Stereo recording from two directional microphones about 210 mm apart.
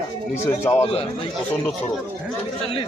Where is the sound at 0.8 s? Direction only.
30° left (ahead or behind).